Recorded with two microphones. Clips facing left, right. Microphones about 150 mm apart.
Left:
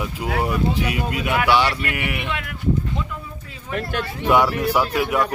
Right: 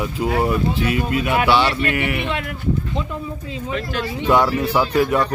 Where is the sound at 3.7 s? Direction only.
55° left (ahead or behind).